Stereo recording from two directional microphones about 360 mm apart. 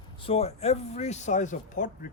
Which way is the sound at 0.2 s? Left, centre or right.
Centre.